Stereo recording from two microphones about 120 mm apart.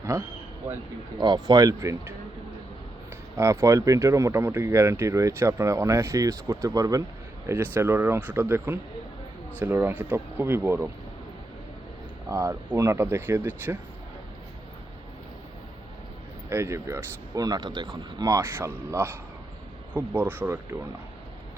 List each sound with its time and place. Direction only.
0.0 s speech: 25° right (ahead or behind)
1.2 s speech: 35° right (ahead or behind)
3.3 s speech: 25° right (ahead or behind)
12.3 s speech: 25° right (ahead or behind)
16.5 s speech: 20° right (ahead or behind)